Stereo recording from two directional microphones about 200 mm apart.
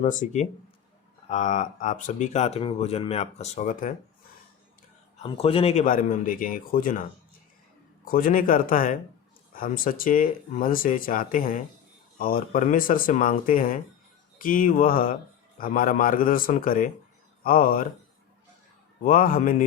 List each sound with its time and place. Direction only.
0.0 s speech: 40° left (ahead or behind)
5.1 s speech: 30° left (ahead or behind)
8.0 s speech: 45° left (ahead or behind)
19.0 s speech: 45° left (ahead or behind)